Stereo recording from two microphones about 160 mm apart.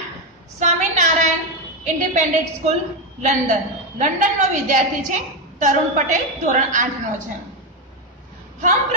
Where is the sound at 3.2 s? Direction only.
50° right (ahead or behind).